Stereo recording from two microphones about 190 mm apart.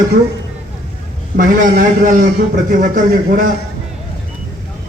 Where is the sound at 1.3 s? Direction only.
45° right (ahead or behind).